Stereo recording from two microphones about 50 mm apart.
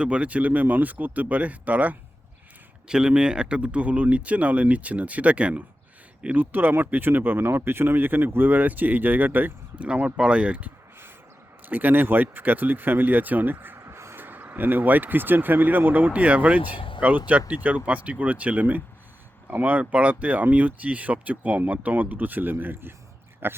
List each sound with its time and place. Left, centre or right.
0.0 s speech: right
2.8 s speech: centre
6.3 s speech: right
10.2 s speech: right
11.6 s speech: right
13.8 s a sound: right
14.2 s speech: right